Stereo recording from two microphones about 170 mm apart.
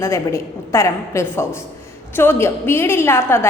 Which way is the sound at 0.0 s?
15° left (ahead or behind).